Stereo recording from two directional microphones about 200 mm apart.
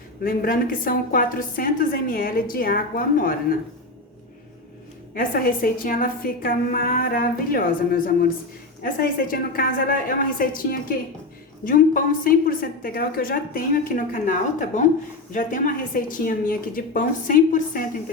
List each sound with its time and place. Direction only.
0.2 s a woman's voice: 45° left (ahead or behind)
5.1 s a woman's voice: 45° left (ahead or behind)